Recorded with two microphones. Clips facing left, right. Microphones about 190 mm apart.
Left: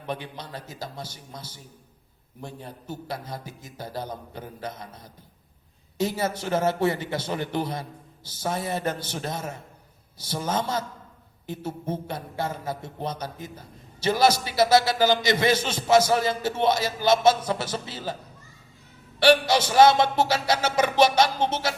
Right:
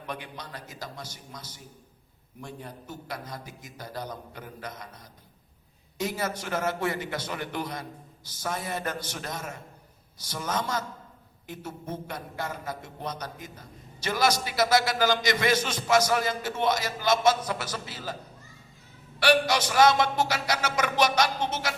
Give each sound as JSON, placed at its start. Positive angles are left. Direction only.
{"t": 0.1, "sound": "a man's voice", "side_deg": 30}
{"t": 6.0, "sound": "a man's voice", "side_deg": 30}
{"t": 19.2, "sound": "a man's voice", "side_deg": 30}